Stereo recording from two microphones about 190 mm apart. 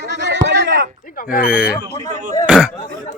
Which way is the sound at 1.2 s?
50° left (ahead or behind).